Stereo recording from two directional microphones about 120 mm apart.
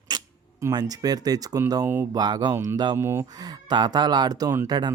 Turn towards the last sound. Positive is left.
turn(degrees=-35)  # may be behind; listen again after turning